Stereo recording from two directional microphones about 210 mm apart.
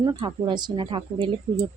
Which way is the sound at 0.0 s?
20° right (ahead or behind).